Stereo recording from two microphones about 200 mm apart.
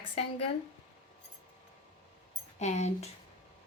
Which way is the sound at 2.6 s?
35° left (ahead or behind).